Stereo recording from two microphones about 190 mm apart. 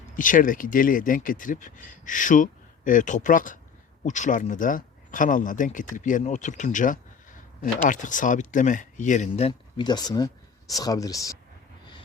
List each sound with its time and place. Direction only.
0.2 s speech: 45° left (ahead or behind); by 11.3 s 15° left (ahead or behind)